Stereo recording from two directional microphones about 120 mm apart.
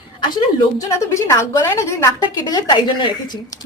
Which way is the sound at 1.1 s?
25° left (ahead or behind).